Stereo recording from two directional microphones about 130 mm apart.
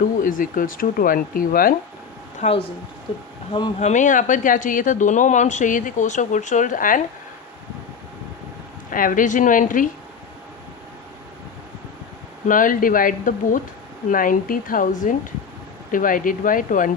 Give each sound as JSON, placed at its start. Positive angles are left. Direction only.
{"t": 0.2, "sound": "speech", "side_deg": 90}
{"t": 2.4, "sound": "speech", "side_deg": 45}
{"t": 3.8, "sound": "speech", "side_deg": 65}
{"t": 8.9, "sound": "speech", "side_deg": 90}
{"t": 12.5, "sound": "speech", "side_deg": 90}